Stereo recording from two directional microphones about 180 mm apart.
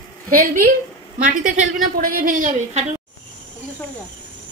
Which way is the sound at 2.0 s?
50° right (ahead or behind).